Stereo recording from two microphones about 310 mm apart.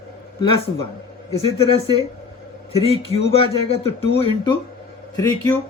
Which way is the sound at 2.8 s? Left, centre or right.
Centre.